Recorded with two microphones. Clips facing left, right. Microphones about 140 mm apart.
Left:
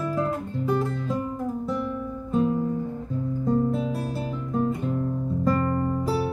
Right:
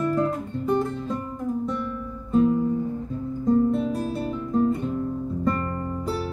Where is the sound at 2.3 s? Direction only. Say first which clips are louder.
Right 4 dB; centre (ahead or behind).